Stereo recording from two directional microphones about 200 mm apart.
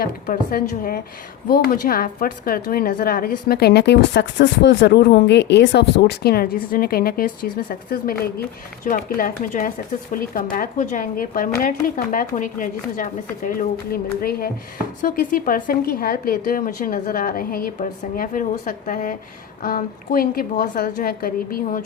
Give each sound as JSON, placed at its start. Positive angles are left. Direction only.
{"t": 0.0, "sound": "a woman's voice", "side_deg": 45}